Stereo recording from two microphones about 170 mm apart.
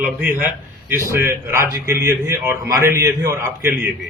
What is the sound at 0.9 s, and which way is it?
A man's voice, 15° right (ahead or behind).